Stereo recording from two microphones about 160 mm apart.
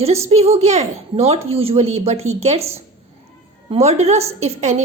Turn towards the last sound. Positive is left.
turn(degrees=-45)  # may be behind; listen again after turning